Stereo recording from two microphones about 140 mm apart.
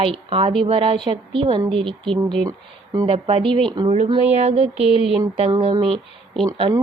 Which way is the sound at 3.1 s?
40° right (ahead or behind).